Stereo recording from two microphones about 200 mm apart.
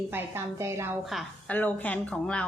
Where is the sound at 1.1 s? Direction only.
5° left (ahead or behind).